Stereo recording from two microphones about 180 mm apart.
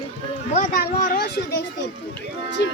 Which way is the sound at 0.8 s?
55° left (ahead or behind).